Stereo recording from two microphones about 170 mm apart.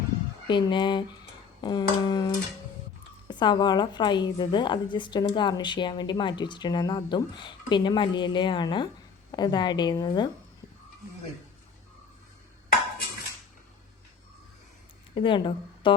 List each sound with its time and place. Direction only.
0.4 s a woman's voice: 25° left (ahead or behind)
15.1 s a woman's voice: 30° left (ahead or behind)